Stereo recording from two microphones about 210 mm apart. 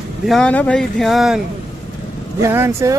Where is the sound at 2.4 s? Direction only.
15° right (ahead or behind).